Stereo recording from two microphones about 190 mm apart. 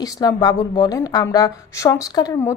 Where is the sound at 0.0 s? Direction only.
20° left (ahead or behind).